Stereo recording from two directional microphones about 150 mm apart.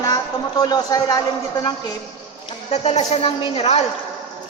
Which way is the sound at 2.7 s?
45° left (ahead or behind).